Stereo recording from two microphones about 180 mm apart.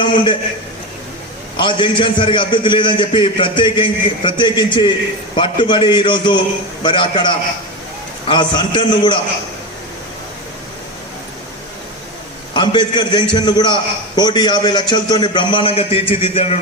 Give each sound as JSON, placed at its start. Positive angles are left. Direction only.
{"t": 0.0, "sound": "a man's voice", "side_deg": 25}
{"t": 1.5, "sound": "a man's voice", "side_deg": 25}
{"t": 8.3, "sound": "a man's voice", "side_deg": 25}
{"t": 12.5, "sound": "a man's voice", "side_deg": 25}